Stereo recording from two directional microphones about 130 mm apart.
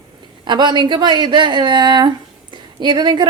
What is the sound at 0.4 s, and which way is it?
A woman's voice, 35° right (ahead or behind).